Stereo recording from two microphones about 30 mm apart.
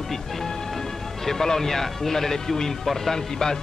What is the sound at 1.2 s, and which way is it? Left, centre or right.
Speech, centre.